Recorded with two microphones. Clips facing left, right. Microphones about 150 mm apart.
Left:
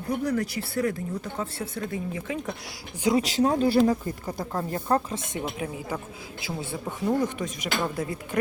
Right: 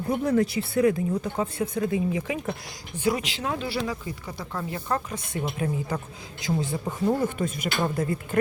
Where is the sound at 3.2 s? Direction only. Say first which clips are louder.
Left 8 dB; 40° left (ahead or behind); by 5.4 s 25° left (ahead or behind).